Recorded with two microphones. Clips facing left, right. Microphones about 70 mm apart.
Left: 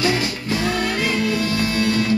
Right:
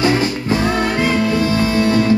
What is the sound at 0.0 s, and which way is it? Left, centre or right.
Music, right.